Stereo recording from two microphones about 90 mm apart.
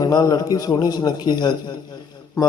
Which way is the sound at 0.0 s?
45° left (ahead or behind).